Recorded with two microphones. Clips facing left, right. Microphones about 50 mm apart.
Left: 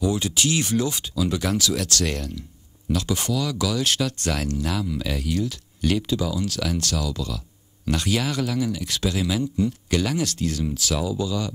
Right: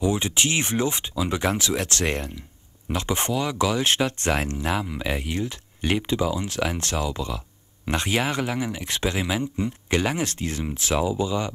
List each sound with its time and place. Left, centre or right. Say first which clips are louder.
0.0 s speech: even; right